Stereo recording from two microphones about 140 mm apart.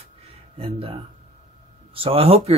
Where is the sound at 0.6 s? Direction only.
40° right (ahead or behind).